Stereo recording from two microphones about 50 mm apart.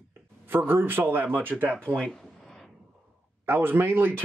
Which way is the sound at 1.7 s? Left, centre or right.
Left.